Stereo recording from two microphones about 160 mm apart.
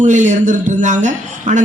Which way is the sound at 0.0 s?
50° right (ahead or behind).